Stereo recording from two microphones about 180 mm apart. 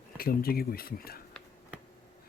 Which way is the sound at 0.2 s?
55° left (ahead or behind).